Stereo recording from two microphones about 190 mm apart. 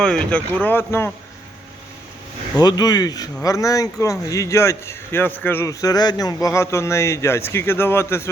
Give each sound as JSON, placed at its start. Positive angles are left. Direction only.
{"t": 0.0, "sound": "a man's voice", "side_deg": 5}
{"t": 2.6, "sound": "a man's voice", "side_deg": 20}